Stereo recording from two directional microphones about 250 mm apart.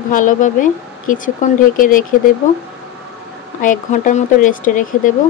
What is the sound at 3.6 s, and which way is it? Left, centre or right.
Speech, left.